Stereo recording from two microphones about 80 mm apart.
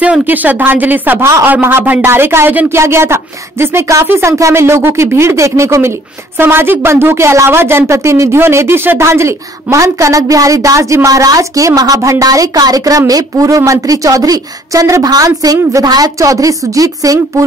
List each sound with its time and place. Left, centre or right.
0.0 s a woman's voice: centre; by 17.5 s right